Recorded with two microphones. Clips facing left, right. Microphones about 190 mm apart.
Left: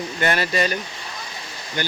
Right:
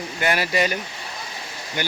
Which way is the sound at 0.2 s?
10° right (ahead or behind).